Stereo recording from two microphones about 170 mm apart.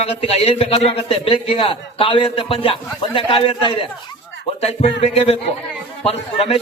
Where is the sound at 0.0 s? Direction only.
35° left (ahead or behind).